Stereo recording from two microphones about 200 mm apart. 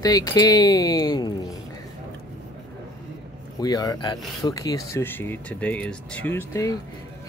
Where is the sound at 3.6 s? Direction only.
20° left (ahead or behind).